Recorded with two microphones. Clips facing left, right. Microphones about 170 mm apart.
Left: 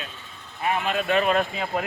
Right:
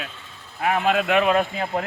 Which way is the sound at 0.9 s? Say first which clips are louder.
Right 4 dB; 90° right.